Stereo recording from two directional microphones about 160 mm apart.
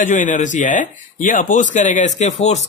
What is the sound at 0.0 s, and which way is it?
Speech, 50° left (ahead or behind).